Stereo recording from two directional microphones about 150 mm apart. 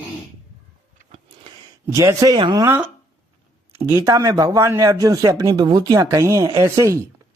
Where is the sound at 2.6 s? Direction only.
10° right (ahead or behind).